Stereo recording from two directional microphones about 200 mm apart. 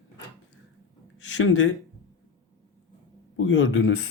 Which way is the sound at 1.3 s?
80° left.